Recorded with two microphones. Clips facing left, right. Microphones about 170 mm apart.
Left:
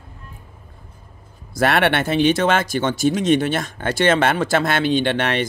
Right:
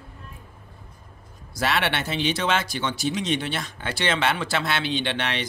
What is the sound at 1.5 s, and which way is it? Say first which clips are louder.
Speech: left 7 dB; 55° left (ahead or behind).